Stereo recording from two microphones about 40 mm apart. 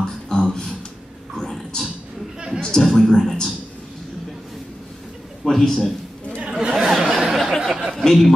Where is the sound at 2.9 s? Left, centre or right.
Centre.